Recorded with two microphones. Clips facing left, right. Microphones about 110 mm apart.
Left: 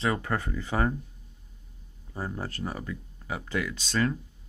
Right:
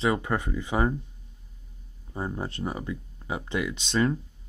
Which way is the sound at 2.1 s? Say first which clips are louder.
Right 2 dB; 20° right (ahead or behind).